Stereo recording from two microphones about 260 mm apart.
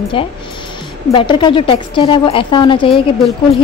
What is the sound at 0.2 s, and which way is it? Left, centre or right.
A woman's voice, centre.